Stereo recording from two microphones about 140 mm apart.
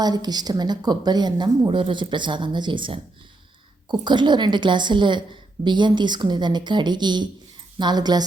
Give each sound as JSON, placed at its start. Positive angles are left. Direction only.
{"t": 0.0, "sound": "a woman's voice", "side_deg": -30}